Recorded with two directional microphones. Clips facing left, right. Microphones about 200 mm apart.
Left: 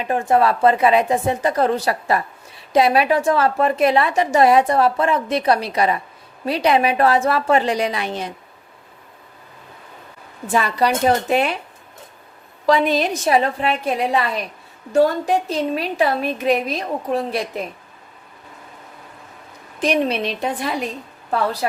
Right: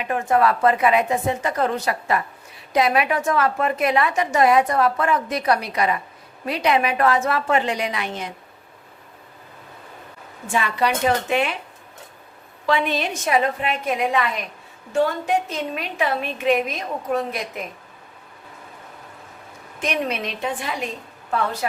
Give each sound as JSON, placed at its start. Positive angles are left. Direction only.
{"t": 0.0, "sound": "a woman's voice", "side_deg": 30}
{"t": 10.4, "sound": "a woman's voice", "side_deg": 40}
{"t": 12.6, "sound": "a woman's voice", "side_deg": 40}
{"t": 19.8, "sound": "a woman's voice", "side_deg": 35}